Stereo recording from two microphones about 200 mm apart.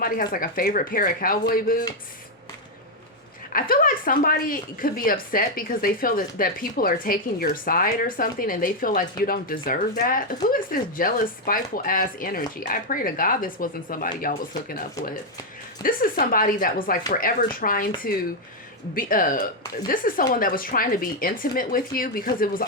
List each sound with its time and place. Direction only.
0.0 s speech: 45° left (ahead or behind)
3.5 s speech: 45° left (ahead or behind)